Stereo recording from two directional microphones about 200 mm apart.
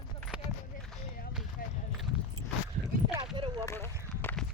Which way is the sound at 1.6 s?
45° left (ahead or behind).